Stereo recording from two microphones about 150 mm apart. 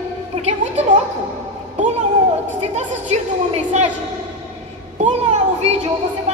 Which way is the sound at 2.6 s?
50° right (ahead or behind).